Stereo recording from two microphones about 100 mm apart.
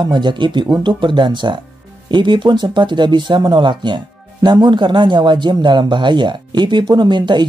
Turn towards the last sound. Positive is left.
turn(degrees=-50)  # may be behind; listen again after turning